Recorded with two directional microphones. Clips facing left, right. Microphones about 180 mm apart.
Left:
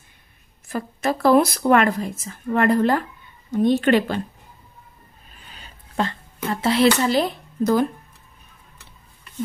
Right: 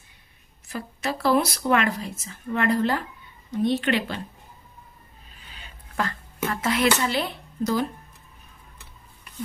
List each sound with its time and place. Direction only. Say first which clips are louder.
0.7 s a woman's voice: left 6 dB; 50° left (ahead or behind)
5.9 s speech: left 3 dB; 25° left (ahead or behind); by 7.8 s 45° left (ahead or behind)